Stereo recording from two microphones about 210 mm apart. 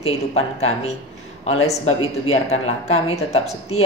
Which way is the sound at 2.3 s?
30° left (ahead or behind).